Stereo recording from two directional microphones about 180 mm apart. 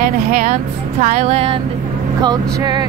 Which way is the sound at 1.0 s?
35° right (ahead or behind).